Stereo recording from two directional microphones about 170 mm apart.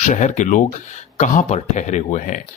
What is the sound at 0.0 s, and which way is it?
Speech, 45° left (ahead or behind).